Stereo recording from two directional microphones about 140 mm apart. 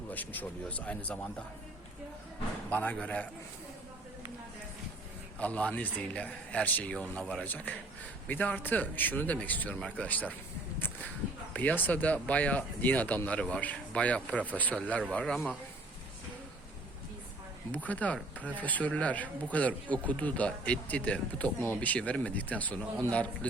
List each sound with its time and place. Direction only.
0.1 s speech: 10° left (ahead or behind)
2.6 s speech: 15° left (ahead or behind)
5.4 s speech: 10° left (ahead or behind)
10.8 s a sound: 15° left (ahead or behind)
11.5 s speech: 10° left (ahead or behind)
17.7 s speech: 10° left (ahead or behind)